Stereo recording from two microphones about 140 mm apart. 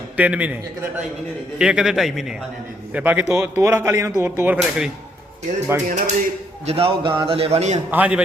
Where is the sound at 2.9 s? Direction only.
10° right (ahead or behind).